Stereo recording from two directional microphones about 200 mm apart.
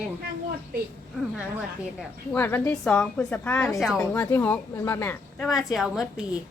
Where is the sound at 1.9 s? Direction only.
10° left (ahead or behind).